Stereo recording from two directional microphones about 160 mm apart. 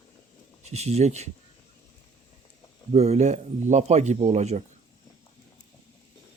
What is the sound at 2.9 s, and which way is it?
Speech, 40° right (ahead or behind).